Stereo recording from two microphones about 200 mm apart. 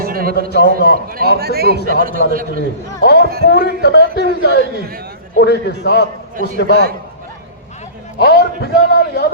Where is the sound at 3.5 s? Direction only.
55° left (ahead or behind).